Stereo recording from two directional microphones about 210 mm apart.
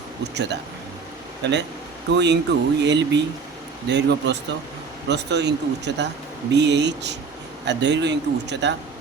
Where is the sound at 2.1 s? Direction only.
55° right (ahead or behind).